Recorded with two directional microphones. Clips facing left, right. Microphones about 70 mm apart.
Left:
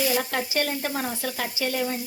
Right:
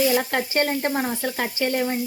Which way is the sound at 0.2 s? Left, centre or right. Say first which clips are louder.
Right 3 dB; right.